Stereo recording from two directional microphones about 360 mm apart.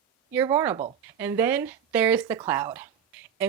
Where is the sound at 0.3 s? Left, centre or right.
Centre.